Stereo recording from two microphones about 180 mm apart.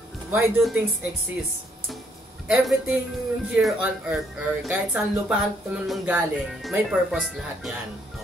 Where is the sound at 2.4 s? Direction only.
5° right (ahead or behind).